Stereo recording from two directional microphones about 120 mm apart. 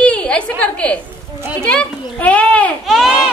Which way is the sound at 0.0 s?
10° left (ahead or behind).